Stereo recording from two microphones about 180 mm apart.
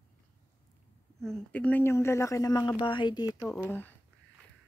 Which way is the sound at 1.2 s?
5° left (ahead or behind).